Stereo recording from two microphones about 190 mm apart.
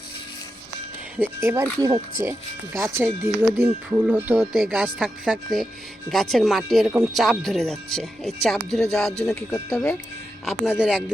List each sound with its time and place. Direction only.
1.4 s speech: 15° right (ahead or behind); by 10.0 s 10° left (ahead or behind)
10.4 s speech: centre (ahead or behind)